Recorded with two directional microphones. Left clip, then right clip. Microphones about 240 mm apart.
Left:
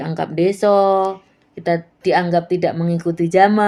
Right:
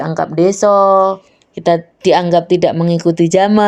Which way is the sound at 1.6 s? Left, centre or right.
Right.